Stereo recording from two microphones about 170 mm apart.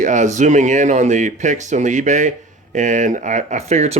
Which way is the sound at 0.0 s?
45° right (ahead or behind).